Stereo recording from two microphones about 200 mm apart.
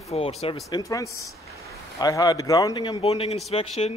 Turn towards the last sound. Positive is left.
turn(degrees=30)  # may be behind; listen again after turning